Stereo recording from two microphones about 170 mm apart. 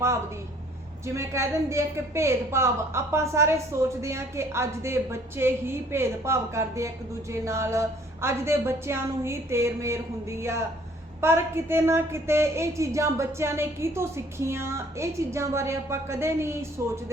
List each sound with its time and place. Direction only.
1.0 s a woman's voice: 15° right (ahead or behind)